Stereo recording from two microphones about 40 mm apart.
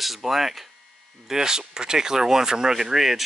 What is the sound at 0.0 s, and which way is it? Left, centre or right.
Speech, centre.